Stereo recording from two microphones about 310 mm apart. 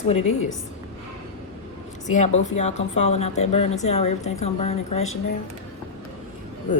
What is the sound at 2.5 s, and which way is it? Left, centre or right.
A woman's voice, left.